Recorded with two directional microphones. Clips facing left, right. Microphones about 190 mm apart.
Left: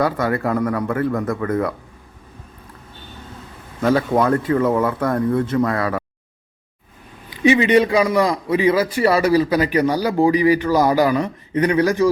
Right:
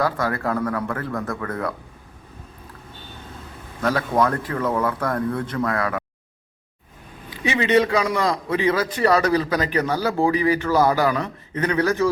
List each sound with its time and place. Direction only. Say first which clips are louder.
0.0 s speech: left 4 dB; 20° left (ahead or behind)
3.8 s speech: left 4 dB; 25° left (ahead or behind)
7.4 s a man's voice: left 5 dB; 15° left (ahead or behind)